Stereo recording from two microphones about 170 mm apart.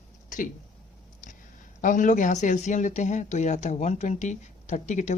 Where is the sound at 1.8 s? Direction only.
50° left (ahead or behind).